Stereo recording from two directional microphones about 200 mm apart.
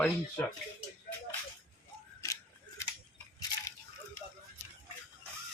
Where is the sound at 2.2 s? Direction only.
15° left (ahead or behind).